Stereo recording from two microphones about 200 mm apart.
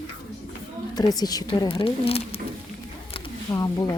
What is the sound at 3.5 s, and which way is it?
Speech, 20° left (ahead or behind).